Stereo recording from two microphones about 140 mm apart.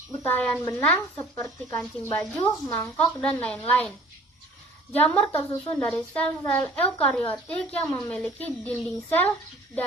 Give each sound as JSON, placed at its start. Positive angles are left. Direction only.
{"t": 0.2, "sound": "a woman's voice", "side_deg": 10}